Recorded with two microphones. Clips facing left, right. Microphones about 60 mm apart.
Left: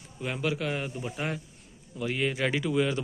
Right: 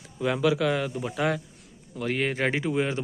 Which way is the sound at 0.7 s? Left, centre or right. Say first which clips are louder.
Right 5 dB; right.